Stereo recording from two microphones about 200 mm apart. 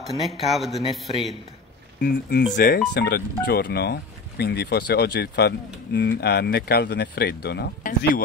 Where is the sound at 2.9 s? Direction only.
55° left (ahead or behind).